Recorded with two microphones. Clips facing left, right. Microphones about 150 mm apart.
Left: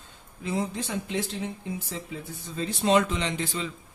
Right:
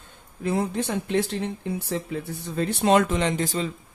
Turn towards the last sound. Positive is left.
turn(degrees=-40)  # may be behind; listen again after turning